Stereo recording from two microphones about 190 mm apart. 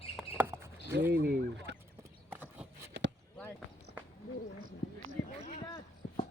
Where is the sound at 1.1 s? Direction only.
55° right (ahead or behind).